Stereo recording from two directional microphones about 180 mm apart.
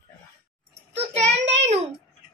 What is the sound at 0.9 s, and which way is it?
Child singing, 35° right (ahead or behind).